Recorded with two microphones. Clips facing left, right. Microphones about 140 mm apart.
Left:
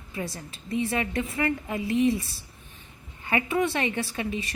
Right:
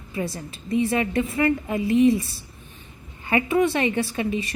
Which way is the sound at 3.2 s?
20° right (ahead or behind).